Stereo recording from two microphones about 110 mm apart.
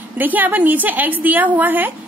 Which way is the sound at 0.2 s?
15° right (ahead or behind).